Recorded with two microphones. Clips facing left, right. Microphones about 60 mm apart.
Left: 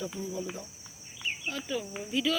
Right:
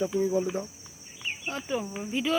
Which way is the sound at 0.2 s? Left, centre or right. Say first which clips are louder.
Right 14 dB; right.